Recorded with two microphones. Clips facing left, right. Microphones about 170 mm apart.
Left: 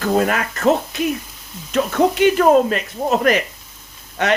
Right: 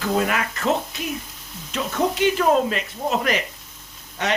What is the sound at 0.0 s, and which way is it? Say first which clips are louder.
Speech: left 4 dB; 45° left (ahead or behind).